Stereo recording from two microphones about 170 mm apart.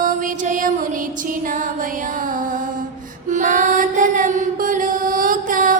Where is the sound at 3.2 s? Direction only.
50° right (ahead or behind).